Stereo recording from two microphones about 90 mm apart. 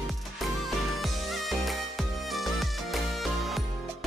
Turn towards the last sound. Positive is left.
turn(degrees=0)  # may be behind; listen again after turning